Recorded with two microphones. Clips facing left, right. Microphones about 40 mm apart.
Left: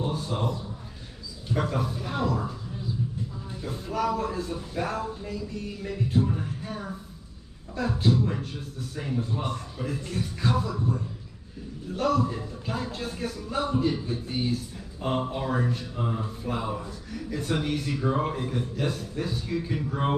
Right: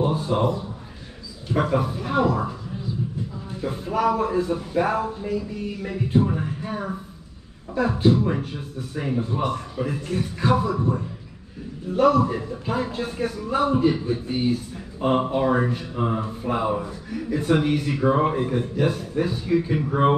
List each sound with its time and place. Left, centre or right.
0.0 s a man's voice: right
3.6 s speech: right
8.0 s speech: right
17.1 s speech: centre